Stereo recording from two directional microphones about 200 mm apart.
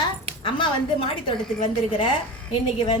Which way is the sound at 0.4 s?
25° left (ahead or behind).